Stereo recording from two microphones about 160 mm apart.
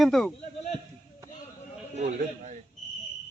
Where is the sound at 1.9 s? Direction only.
45° right (ahead or behind).